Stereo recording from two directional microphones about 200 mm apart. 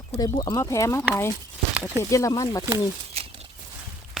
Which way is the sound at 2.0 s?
15° left (ahead or behind).